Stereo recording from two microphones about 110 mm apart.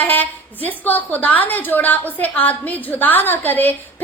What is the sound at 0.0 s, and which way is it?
A woman's voice, 15° left (ahead or behind).